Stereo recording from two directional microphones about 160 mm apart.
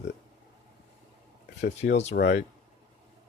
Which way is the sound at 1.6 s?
90° left.